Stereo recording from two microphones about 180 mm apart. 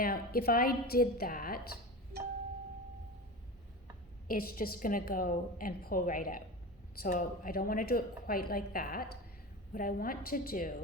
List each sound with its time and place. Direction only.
0.0 s a woman's voice: 55° left (ahead or behind)
2.1 s a sound: 60° right (ahead or behind)
4.3 s a woman's voice: 55° left (ahead or behind)